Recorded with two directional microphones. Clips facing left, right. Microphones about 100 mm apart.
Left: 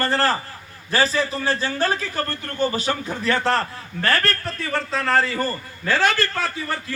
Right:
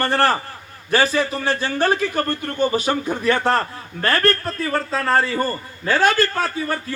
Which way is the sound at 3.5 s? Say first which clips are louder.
Right 2 dB; 35° right (ahead or behind).